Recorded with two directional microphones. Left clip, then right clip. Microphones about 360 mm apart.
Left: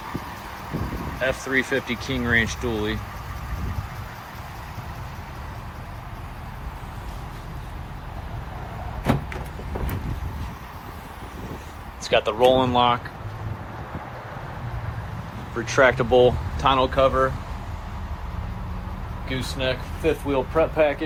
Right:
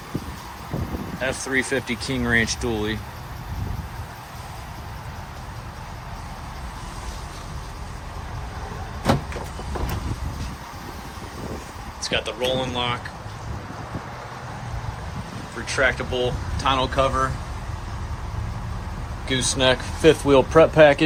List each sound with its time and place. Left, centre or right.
1.2 s speech: centre
12.0 s speech: centre
15.6 s speech: centre
16.6 s speech: centre
19.3 s speech: centre